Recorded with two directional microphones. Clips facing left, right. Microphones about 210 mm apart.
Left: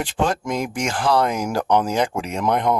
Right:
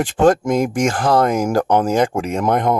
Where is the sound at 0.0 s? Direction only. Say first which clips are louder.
Right 8 dB; 50° right (ahead or behind).